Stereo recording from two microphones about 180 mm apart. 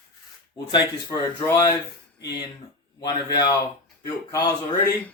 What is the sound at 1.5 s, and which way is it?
Speech, 20° left (ahead or behind).